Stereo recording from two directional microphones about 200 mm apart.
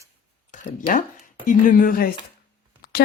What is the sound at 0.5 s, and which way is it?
Speech, 40° left (ahead or behind).